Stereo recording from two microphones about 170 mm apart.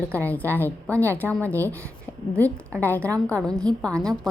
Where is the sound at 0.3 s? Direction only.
10° left (ahead or behind).